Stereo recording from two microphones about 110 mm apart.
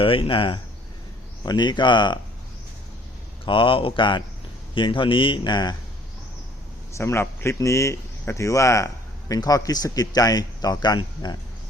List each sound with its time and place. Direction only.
0.0 s speech: 55° left (ahead or behind)
3.4 s speech: 50° left (ahead or behind)
6.9 s a man's voice: 25° left (ahead or behind)